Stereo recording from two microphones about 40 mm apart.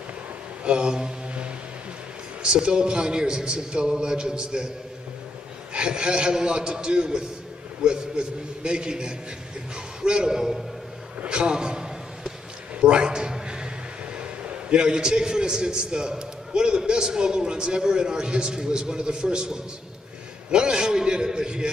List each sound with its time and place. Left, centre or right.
0.7 s a man's voice: right
2.4 s a man's voice: right
5.7 s a man's voice: right
11.2 s a sound: right
14.1 s a man's voice: right